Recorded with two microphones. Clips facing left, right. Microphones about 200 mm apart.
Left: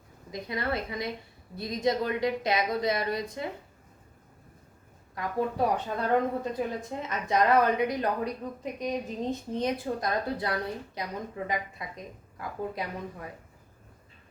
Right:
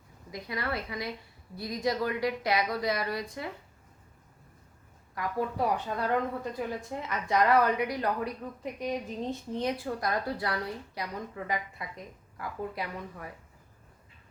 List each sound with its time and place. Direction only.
0.3 s a woman's voice: 20° left (ahead or behind)
5.1 s a woman's voice: 20° left (ahead or behind)